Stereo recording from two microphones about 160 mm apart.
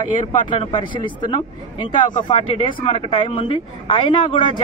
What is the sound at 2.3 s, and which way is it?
A woman's voice, 35° left (ahead or behind).